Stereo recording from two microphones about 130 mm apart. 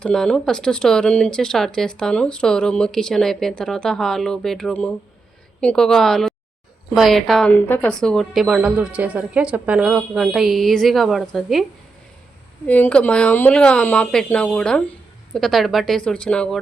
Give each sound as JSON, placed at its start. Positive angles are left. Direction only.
{"t": 0.0, "sound": "speech", "side_deg": 5}
{"t": 12.6, "sound": "speech", "side_deg": 10}